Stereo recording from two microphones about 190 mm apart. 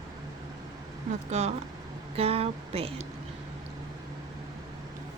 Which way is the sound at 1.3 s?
35° right (ahead or behind).